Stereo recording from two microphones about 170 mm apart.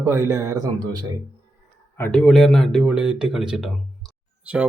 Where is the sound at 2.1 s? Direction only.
5° left (ahead or behind).